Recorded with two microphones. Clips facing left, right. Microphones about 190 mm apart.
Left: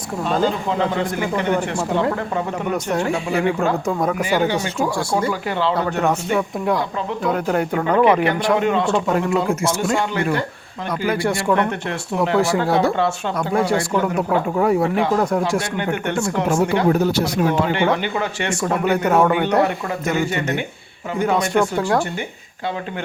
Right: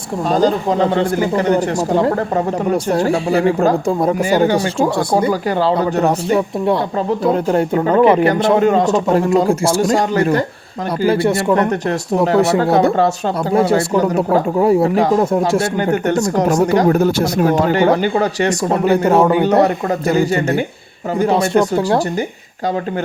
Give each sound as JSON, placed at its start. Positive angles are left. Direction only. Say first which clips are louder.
{"t": 0.3, "sound": "speech", "louder": "right 6 dB", "side_deg": -40}
{"t": 4.2, "sound": "speech", "louder": "right 5 dB", "side_deg": -45}
{"t": 11.0, "sound": "speech", "louder": "right 6 dB", "side_deg": -25}
{"t": 11.5, "sound": "speech", "louder": "right 5 dB", "side_deg": -40}
{"t": 13.5, "sound": "speech", "louder": "right 5 dB", "side_deg": -25}
{"t": 13.9, "sound": "speech", "louder": "right 5 dB", "side_deg": -35}
{"t": 15.8, "sound": "speech", "louder": "right 6 dB", "side_deg": -40}